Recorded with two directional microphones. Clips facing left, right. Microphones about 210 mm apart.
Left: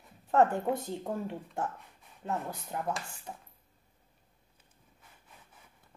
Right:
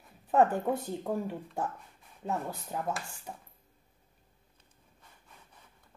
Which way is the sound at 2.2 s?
10° right (ahead or behind).